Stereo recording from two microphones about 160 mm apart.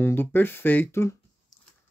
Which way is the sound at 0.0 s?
10° left (ahead or behind).